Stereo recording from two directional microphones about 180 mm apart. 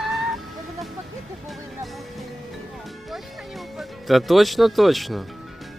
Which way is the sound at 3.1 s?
Centre (ahead or behind).